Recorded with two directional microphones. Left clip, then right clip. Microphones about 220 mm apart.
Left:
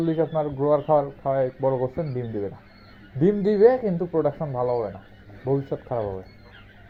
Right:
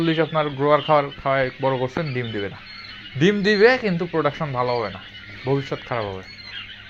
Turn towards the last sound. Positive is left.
turn(degrees=-30)  # may be behind; listen again after turning